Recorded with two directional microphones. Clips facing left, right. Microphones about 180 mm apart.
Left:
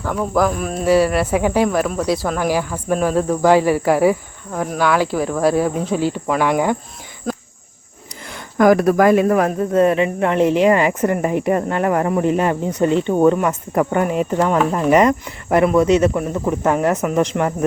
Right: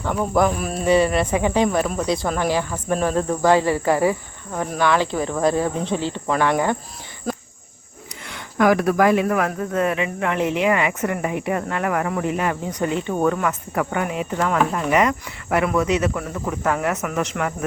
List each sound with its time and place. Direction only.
0.0 s speech: centre (ahead or behind)
2.5 s cricket: 10° left (ahead or behind)
8.5 s speech: 45° left (ahead or behind)
9.2 s speech: 30° left (ahead or behind)
14.4 s speech: 30° left (ahead or behind)
16.1 s speech: 20° left (ahead or behind)